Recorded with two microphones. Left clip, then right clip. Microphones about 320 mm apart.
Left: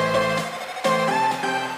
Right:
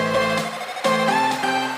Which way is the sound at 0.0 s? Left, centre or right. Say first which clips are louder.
Right 1 dB; centre.